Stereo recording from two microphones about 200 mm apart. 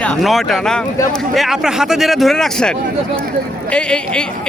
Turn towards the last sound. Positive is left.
turn(degrees=5)  # may be behind; listen again after turning